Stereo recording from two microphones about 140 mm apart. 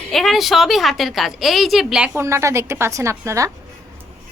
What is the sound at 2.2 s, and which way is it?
A woman's voice, 20° right (ahead or behind).